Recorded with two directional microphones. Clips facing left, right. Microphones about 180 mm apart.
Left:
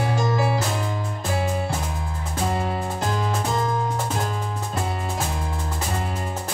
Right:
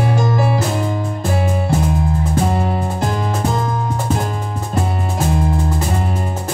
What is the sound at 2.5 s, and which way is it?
Music, 50° right (ahead or behind).